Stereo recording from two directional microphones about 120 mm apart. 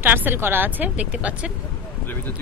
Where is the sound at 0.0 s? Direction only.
15° right (ahead or behind).